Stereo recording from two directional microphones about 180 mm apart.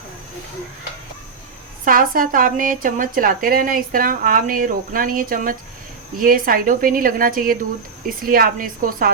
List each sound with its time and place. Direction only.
1.8 s speech: 50° right (ahead or behind)